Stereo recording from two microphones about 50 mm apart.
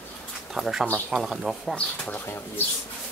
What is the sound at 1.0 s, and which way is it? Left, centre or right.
Speech, centre.